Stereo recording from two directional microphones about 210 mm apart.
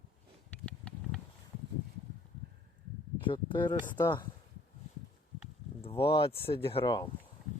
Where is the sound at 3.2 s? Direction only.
25° left (ahead or behind).